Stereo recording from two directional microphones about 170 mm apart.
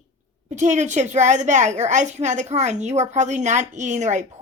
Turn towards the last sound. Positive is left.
turn(degrees=-45)  # may be behind; listen again after turning